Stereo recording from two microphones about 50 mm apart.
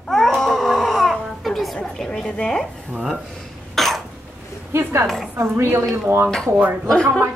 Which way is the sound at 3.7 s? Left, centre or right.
Centre.